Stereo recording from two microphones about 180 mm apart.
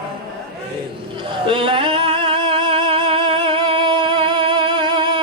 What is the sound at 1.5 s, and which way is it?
Music, 30° right (ahead or behind).